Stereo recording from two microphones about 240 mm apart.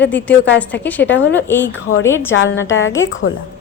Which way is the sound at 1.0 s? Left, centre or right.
Left.